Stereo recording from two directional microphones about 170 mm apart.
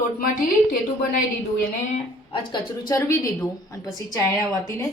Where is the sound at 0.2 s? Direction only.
60° left (ahead or behind).